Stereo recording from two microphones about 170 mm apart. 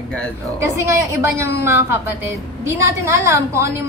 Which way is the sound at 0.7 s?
15° right (ahead or behind).